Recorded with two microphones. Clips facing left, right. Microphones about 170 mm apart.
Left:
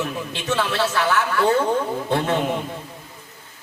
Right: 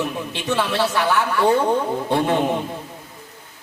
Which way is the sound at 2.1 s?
15° right (ahead or behind).